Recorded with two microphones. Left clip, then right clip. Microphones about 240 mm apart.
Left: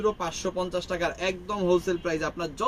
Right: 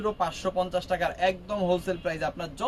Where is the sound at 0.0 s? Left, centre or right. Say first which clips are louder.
Even; centre.